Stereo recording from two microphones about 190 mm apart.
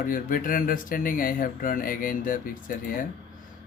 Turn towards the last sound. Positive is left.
turn(degrees=45)  # may be behind; listen again after turning